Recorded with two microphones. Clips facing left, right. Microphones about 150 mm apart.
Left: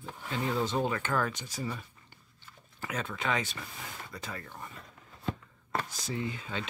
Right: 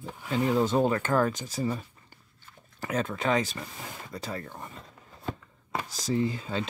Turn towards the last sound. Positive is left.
turn(degrees=-35)  # may be behind; listen again after turning